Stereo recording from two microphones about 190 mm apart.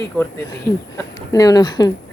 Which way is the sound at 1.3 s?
20° left (ahead or behind).